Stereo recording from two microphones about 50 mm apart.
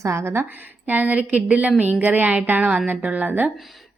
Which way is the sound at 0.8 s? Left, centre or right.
Right.